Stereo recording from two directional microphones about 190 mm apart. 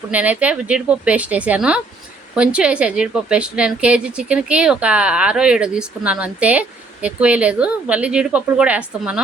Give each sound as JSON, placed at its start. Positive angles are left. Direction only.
{"t": 0.1, "sound": "a woman's voice", "side_deg": -5}